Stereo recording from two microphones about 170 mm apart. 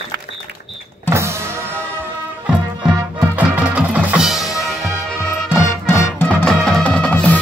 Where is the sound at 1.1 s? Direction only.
15° right (ahead or behind).